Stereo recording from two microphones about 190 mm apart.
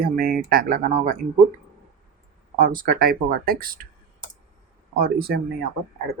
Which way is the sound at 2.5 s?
50° right (ahead or behind).